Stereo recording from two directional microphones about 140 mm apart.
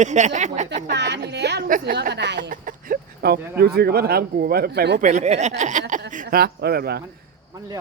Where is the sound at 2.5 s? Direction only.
80° right.